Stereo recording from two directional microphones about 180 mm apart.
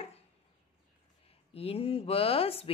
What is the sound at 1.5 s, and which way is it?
Speech, 35° left (ahead or behind).